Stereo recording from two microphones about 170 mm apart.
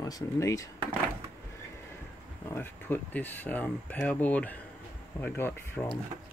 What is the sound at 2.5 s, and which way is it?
Speech, 10° left (ahead or behind).